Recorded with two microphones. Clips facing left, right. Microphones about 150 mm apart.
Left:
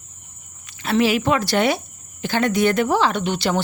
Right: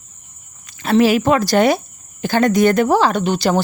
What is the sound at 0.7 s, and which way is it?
Speech, 40° right (ahead or behind).